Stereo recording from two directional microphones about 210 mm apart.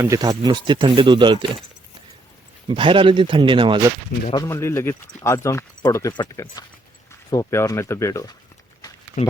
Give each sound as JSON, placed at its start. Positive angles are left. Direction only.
{"t": 0.0, "sound": "speech", "side_deg": -15}
{"t": 2.6, "sound": "speech", "side_deg": -25}
{"t": 4.3, "sound": "speech", "side_deg": 15}
{"t": 9.2, "sound": "speech", "side_deg": 35}